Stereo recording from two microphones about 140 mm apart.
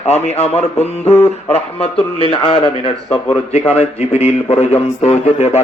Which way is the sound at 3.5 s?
50° left (ahead or behind).